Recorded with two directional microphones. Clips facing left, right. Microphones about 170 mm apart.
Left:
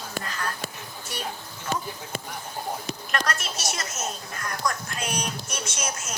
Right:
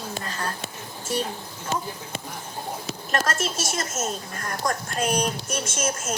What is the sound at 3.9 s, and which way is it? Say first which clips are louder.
Speech: right 4 dB; 45° right (ahead or behind).